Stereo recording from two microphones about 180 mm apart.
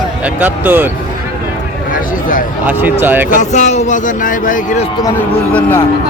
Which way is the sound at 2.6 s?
10° right (ahead or behind).